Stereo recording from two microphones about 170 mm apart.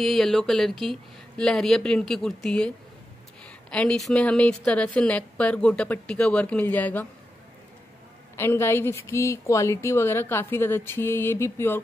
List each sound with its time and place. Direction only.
0.0 s speech: centre (ahead or behind)
3.7 s a woman's voice: 5° left (ahead or behind)
8.4 s a woman's voice: 15° left (ahead or behind)